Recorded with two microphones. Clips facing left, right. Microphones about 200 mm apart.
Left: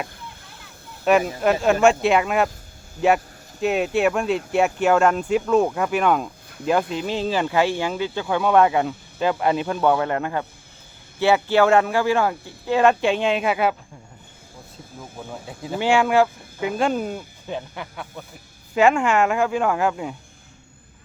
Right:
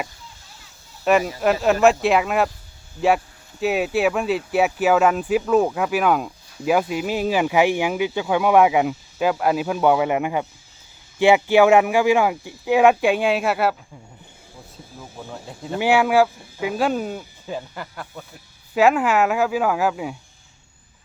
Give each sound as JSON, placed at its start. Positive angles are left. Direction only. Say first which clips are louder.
{"t": 0.2, "sound": "a sound", "louder": "left 5 dB", "side_deg": 55}
{"t": 1.4, "sound": "speech", "louder": "even", "side_deg": 0}
{"t": 3.6, "sound": "speech", "louder": "even", "side_deg": -5}
{"t": 15.3, "sound": "speech", "louder": "even", "side_deg": 5}
{"t": 15.8, "sound": "speech", "louder": "right 1 dB", "side_deg": -5}